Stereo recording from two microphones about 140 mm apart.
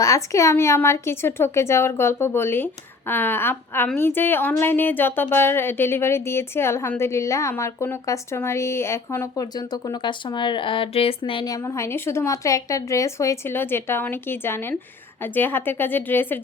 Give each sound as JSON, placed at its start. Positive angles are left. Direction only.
{"t": 0.0, "sound": "speech", "side_deg": 20}
{"t": 10.0, "sound": "speech", "side_deg": 35}
{"t": 11.4, "sound": "speech", "side_deg": 20}